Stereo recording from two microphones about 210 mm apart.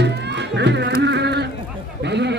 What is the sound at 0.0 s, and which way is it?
Music, 55° right (ahead or behind).